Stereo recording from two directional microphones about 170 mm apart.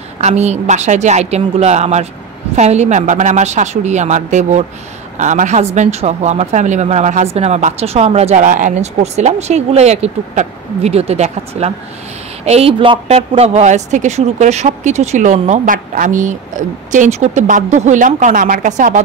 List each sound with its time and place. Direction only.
0.2 s a woman's voice: 40° right (ahead or behind)